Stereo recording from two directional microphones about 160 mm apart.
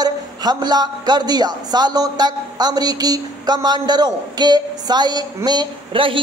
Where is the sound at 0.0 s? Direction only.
25° right (ahead or behind).